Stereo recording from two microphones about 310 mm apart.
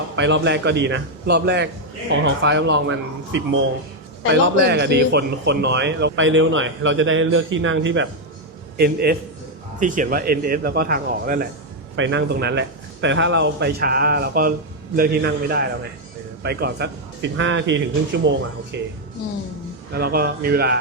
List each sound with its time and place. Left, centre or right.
0.2 s a man's voice: right
19.9 s a man's voice: right